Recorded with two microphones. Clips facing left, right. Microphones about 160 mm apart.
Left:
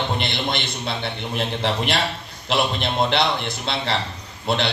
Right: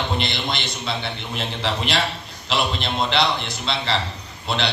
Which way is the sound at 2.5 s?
55° left (ahead or behind).